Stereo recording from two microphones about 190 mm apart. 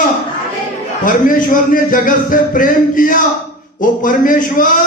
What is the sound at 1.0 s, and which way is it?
Music, 45° left (ahead or behind).